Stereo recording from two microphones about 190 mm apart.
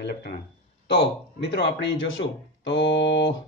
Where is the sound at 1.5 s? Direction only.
70° left (ahead or behind).